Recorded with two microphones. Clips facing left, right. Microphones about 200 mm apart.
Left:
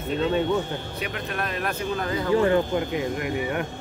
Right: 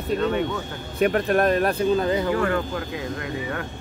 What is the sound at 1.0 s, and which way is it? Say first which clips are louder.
Speech: right 15 dB; 50° right (ahead or behind).